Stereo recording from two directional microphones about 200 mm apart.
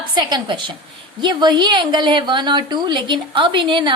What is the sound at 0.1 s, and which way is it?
A woman's voice, 20° right (ahead or behind).